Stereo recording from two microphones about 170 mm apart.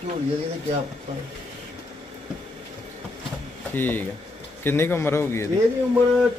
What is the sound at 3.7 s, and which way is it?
A man's voice, 10° left (ahead or behind).